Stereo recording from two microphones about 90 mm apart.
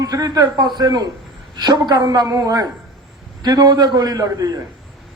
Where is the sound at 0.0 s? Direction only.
45° right (ahead or behind).